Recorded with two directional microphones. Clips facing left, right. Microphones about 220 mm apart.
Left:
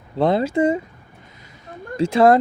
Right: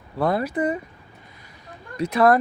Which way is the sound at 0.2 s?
25° left (ahead or behind).